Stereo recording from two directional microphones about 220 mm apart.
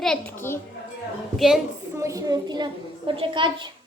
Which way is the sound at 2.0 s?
15° right (ahead or behind).